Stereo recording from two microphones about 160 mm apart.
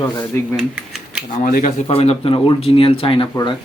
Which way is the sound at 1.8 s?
35° left (ahead or behind).